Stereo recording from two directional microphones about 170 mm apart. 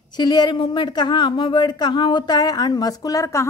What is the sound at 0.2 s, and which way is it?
A woman's voice, 25° left (ahead or behind).